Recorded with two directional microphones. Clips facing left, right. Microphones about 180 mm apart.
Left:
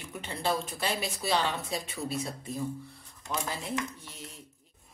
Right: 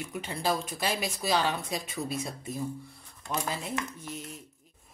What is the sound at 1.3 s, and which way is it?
Speech, 15° right (ahead or behind).